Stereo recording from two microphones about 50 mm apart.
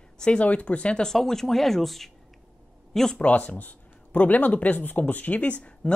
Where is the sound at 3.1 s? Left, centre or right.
Left.